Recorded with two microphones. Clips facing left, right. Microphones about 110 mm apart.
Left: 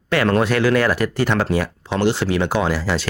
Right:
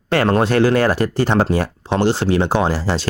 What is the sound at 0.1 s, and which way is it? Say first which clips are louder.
Speech: right 2 dB; 35° right (ahead or behind).